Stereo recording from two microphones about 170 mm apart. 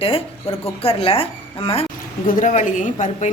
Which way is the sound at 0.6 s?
35° left (ahead or behind).